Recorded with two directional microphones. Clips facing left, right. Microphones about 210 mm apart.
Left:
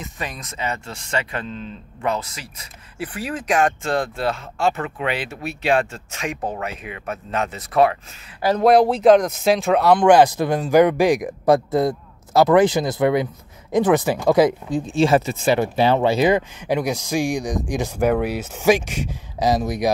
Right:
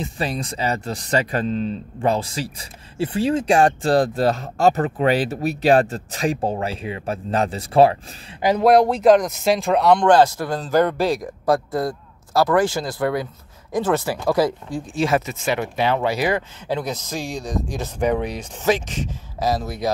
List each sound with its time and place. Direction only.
0.0 s speech: 30° right (ahead or behind)
8.4 s speech: 15° right (ahead or behind)
8.6 s speech: centre (ahead or behind)
10.1 s speech: 15° left (ahead or behind)